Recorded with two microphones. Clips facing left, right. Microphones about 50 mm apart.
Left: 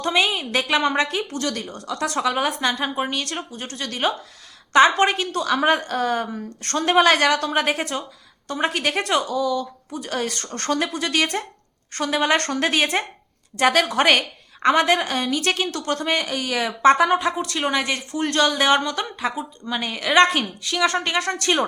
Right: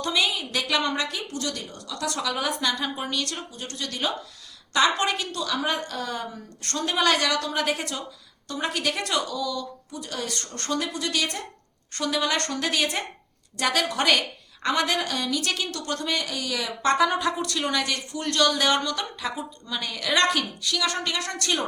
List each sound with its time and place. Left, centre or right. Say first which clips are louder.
0.0 s a woman's voice: left 4 dB; left
20.3 s a woman's voice: left 3 dB; left